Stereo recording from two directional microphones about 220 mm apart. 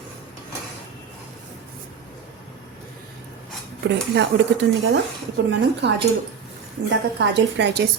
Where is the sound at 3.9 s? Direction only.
50° right (ahead or behind).